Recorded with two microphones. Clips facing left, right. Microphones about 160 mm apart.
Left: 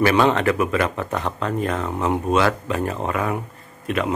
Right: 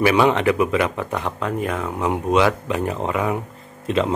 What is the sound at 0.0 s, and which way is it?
Speech, 10° right (ahead or behind).